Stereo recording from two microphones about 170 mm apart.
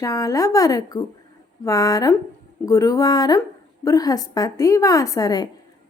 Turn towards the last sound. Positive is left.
turn(degrees=20)  # may be behind; listen again after turning